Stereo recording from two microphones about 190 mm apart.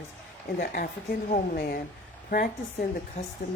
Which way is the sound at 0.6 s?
50° left (ahead or behind).